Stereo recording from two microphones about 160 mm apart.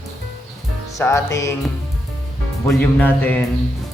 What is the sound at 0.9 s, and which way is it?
Music, 20° left (ahead or behind).